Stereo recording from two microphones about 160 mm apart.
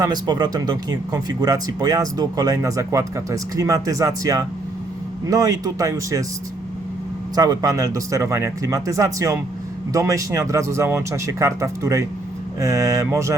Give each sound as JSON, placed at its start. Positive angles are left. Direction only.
{"t": 0.0, "sound": "speech", "side_deg": -25}
{"t": 7.3, "sound": "speech", "side_deg": -25}